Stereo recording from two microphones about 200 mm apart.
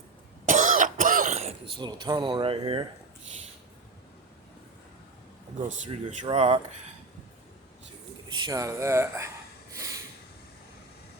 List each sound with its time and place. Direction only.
0.4 s throat clearing: 40° right (ahead or behind)
1.8 s speech: 20° right (ahead or behind)
5.6 s speech: 40° right (ahead or behind)
8.4 s speech: 15° right (ahead or behind)
9.7 s snort: 15° right (ahead or behind)